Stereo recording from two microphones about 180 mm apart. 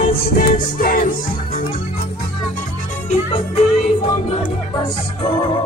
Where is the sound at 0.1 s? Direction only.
50° left (ahead or behind).